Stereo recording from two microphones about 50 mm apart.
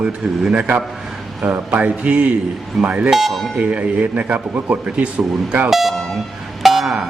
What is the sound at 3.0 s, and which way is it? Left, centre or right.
Speech, centre.